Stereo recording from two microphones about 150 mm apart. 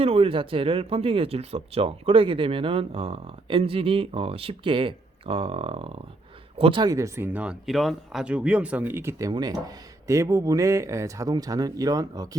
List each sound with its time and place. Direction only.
0.0 s speech: 40° right (ahead or behind)